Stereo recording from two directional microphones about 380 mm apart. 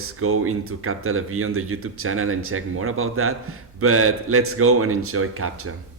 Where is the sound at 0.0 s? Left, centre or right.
Right.